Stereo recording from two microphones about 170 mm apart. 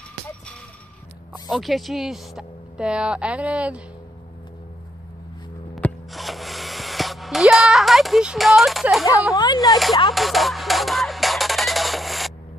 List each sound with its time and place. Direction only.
1.5 s a woman's voice: centre (ahead or behind)
5.8 s a sound: centre (ahead or behind)
9.3 s speech: 25° left (ahead or behind)
10.1 s music: centre (ahead or behind)